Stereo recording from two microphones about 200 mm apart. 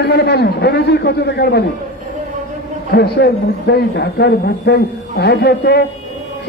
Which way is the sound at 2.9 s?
50° left (ahead or behind).